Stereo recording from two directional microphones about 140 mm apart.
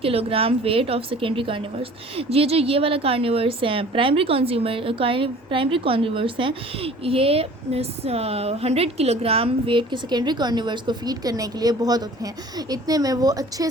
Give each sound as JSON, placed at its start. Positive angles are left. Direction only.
{"t": 0.0, "sound": "a woman's voice", "side_deg": -45}